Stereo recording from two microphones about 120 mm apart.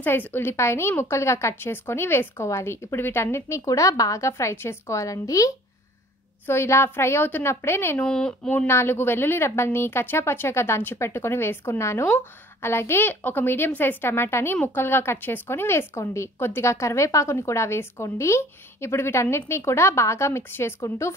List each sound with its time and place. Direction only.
0.0 s a woman's voice: 15° left (ahead or behind)
8.1 s a woman's voice: 5° left (ahead or behind); by 21.1 s 20° left (ahead or behind)